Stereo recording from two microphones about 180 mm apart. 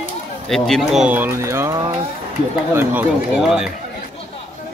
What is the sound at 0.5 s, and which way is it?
Speech, centre (ahead or behind).